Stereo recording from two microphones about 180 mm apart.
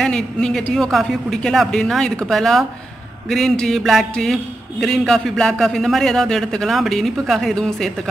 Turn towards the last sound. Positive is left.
turn(degrees=5)  # may be behind; listen again after turning